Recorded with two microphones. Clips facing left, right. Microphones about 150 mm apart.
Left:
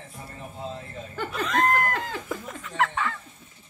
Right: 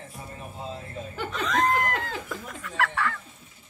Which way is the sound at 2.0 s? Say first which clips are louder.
Left 2 dB; 20° left (ahead or behind).